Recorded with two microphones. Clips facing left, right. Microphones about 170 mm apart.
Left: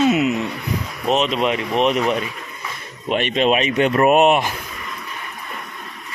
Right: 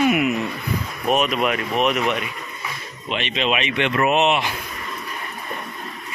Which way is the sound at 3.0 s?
45° left (ahead or behind).